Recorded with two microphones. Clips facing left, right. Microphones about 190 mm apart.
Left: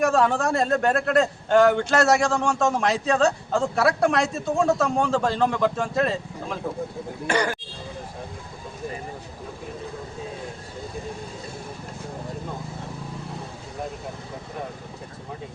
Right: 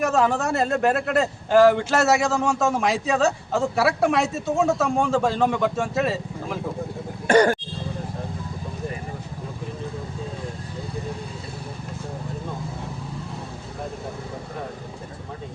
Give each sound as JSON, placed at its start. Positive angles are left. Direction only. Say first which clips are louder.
{"t": 0.0, "sound": "a man's voice", "louder": "even", "side_deg": -5}
{"t": 7.3, "sound": "speech", "louder": "right 8 dB", "side_deg": -50}